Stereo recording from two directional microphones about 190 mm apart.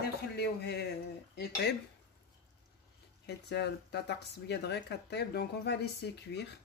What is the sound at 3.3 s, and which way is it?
Speech, 60° left (ahead or behind).